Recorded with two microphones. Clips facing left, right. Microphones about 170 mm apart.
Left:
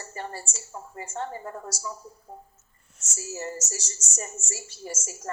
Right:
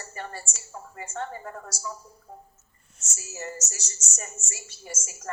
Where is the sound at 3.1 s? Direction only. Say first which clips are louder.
Left 3 dB; 30° left (ahead or behind).